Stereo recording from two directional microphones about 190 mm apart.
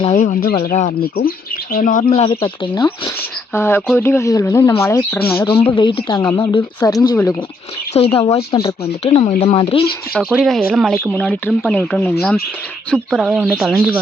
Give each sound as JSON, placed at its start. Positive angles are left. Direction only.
{"t": 0.0, "sound": "speech", "side_deg": 40}
{"t": 2.0, "sound": "speech", "side_deg": 30}
{"t": 3.5, "sound": "speech", "side_deg": 15}
{"t": 5.5, "sound": "speech", "side_deg": 30}
{"t": 6.2, "sound": "speech", "side_deg": 10}
{"t": 6.5, "sound": "speech", "side_deg": 20}
{"t": 7.9, "sound": "speech", "side_deg": 30}
{"t": 10.2, "sound": "speech", "side_deg": 0}
{"t": 12.9, "sound": "speech", "side_deg": 0}